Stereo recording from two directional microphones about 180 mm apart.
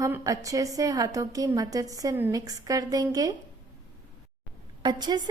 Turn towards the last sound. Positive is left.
turn(degrees=-25)  # may be behind; listen again after turning